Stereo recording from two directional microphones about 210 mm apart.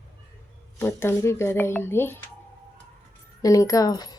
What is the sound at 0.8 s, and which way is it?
Speech, 10° left (ahead or behind).